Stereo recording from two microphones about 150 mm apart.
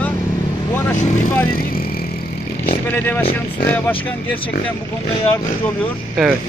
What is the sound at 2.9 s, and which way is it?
Speech, 10° left (ahead or behind).